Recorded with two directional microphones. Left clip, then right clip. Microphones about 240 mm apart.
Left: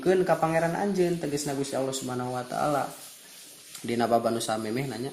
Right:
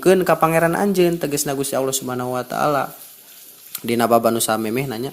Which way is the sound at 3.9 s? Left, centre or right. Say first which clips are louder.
Right 9 dB; right.